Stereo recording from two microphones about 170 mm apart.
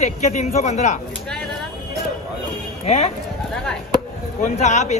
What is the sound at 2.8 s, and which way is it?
Speech, 40° left (ahead or behind).